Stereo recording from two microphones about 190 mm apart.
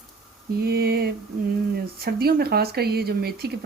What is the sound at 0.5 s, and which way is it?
Speech, 55° right (ahead or behind).